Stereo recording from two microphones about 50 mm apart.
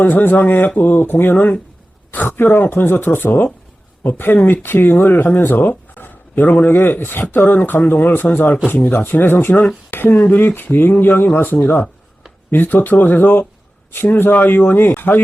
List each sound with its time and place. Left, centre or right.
0.0 s speech: left